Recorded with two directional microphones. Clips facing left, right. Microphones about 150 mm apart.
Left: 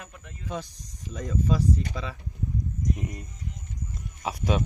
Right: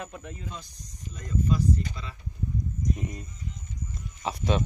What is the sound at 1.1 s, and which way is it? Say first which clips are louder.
Speech: left 1 dB; 90° left.